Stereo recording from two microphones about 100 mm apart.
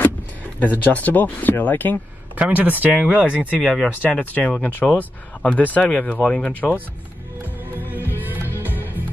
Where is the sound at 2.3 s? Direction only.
15° right (ahead or behind).